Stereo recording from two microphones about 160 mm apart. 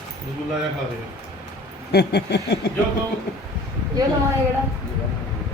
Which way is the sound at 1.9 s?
90° left.